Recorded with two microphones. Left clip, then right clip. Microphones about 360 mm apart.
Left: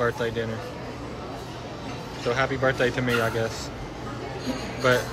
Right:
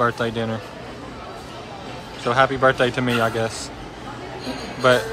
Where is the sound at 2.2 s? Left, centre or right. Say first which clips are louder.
Right 7 dB; centre.